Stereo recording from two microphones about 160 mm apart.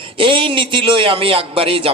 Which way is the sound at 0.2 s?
35° right (ahead or behind).